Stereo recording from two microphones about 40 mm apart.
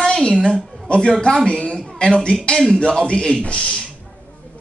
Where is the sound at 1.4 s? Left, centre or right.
Left.